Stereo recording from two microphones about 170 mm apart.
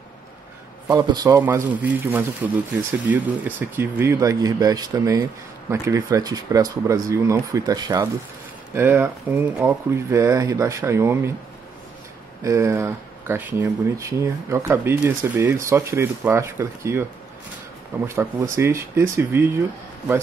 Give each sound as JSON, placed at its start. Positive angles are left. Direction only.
{"t": 0.8, "sound": "speech", "side_deg": -25}
{"t": 1.4, "sound": "speech", "side_deg": -10}
{"t": 12.4, "sound": "speech", "side_deg": -15}
{"t": 18.0, "sound": "speech", "side_deg": -15}